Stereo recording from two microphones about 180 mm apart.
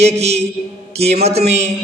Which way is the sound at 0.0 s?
35° right (ahead or behind).